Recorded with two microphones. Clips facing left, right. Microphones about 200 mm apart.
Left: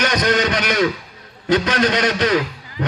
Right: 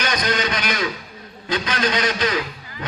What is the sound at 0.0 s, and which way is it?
A man's voice, 70° left (ahead or behind).